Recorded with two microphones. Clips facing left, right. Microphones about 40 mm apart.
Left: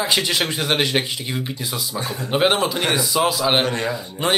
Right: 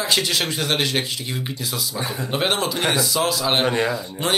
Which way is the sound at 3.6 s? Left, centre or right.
Centre.